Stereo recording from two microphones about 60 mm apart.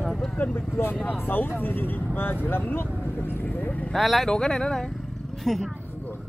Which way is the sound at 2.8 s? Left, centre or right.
Left.